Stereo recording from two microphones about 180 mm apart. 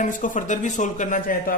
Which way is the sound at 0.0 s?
45° left (ahead or behind).